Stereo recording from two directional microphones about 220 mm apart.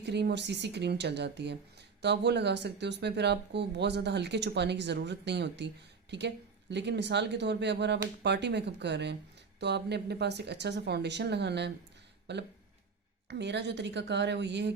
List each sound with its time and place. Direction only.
0.0 s speech: 50° right (ahead or behind)